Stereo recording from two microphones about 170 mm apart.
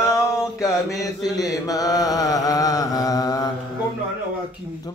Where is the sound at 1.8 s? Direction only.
20° left (ahead or behind).